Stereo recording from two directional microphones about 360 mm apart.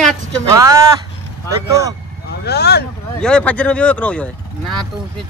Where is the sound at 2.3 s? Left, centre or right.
Left.